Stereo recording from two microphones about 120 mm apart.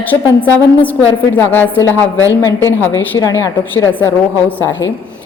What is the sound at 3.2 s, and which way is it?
Speech, 30° left (ahead or behind).